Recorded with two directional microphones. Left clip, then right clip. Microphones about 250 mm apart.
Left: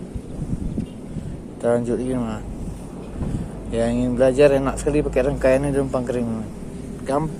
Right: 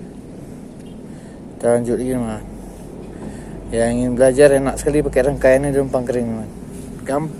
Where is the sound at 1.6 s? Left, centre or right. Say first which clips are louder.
Right 4 dB; centre.